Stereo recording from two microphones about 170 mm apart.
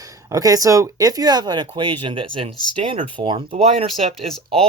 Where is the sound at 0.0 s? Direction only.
20° right (ahead or behind).